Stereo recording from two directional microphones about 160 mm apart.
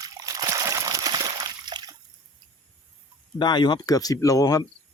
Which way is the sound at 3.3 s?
30° left (ahead or behind).